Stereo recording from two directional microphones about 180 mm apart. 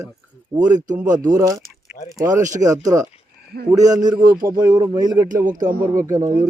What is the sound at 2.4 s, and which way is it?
Speech, 45° right (ahead or behind).